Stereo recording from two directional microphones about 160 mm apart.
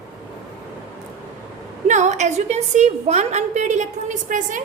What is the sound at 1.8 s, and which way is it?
A woman's voice, 50° right (ahead or behind).